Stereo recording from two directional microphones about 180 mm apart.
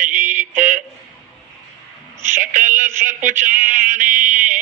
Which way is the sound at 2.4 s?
45° right (ahead or behind).